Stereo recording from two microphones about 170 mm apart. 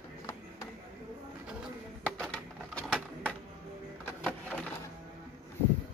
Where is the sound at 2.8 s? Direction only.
5° left (ahead or behind).